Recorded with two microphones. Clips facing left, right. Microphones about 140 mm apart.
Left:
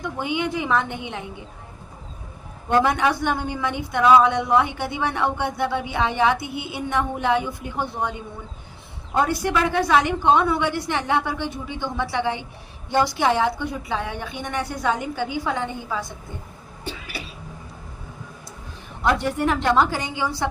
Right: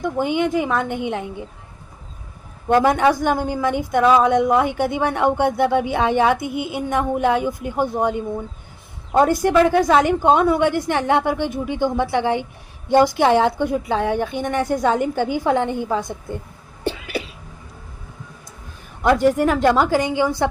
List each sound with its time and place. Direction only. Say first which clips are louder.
0.2 s speech: right 5 dB; 45° right (ahead or behind)
2.6 s speech: right 4 dB; 45° right (ahead or behind)
9.1 s speech: right 7 dB; 45° right (ahead or behind)
16.8 s cough: right 9 dB; 55° right (ahead or behind)
19.1 s speech: right 8 dB; 40° right (ahead or behind)